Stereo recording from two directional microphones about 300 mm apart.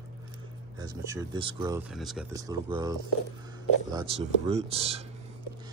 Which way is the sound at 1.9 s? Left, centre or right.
Centre.